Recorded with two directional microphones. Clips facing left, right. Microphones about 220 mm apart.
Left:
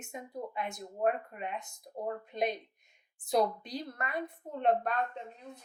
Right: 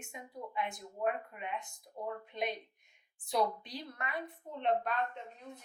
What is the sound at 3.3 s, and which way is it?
A woman's voice, 45° left (ahead or behind).